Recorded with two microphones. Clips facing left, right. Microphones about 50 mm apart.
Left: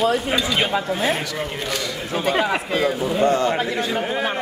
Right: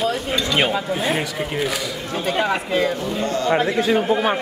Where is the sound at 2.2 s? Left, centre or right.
Centre.